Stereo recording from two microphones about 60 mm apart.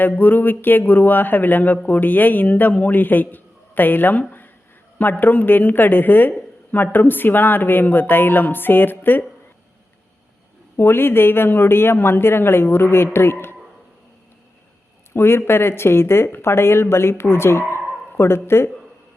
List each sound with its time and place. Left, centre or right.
0.0 s a woman's voice: left
5.2 s a woman's voice: left
10.8 s a woman's voice: left
15.1 s speech: left